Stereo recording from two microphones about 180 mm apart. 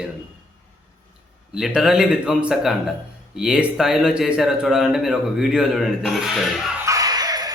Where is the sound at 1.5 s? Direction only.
5° right (ahead or behind).